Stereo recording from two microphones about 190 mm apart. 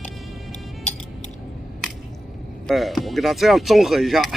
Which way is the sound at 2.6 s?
Centre (ahead or behind).